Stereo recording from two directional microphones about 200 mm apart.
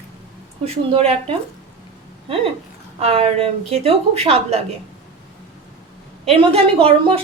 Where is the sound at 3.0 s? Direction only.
30° right (ahead or behind).